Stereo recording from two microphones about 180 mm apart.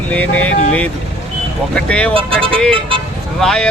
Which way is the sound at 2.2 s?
30° right (ahead or behind).